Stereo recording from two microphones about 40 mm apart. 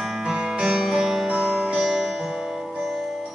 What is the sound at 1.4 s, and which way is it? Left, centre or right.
Music, right.